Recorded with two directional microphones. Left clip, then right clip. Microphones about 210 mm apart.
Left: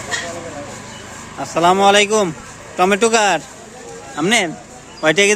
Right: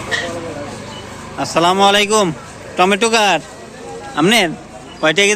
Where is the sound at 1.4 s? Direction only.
Centre (ahead or behind).